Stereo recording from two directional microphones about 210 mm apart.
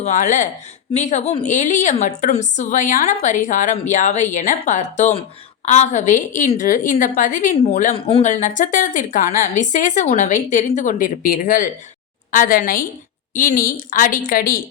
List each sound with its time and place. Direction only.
0.0 s a woman's voice: 35° left (ahead or behind)
7.9 s a woman's voice: 25° left (ahead or behind); by 14.6 s 45° left (ahead or behind)